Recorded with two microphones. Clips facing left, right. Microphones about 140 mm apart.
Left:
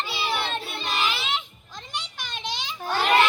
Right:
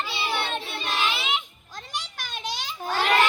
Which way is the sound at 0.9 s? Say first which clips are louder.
Even; centre (ahead or behind).